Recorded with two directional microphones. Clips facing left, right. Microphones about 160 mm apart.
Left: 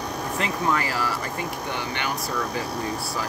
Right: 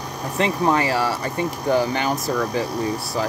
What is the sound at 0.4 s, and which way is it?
Speech, 30° right (ahead or behind).